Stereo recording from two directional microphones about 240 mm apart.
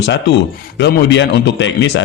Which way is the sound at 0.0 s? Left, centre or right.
Left.